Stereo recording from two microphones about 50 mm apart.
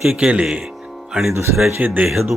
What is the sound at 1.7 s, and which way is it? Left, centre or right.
Speech, right.